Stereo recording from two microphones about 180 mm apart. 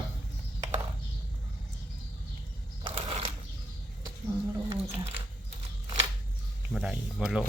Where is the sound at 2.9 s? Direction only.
30° right (ahead or behind).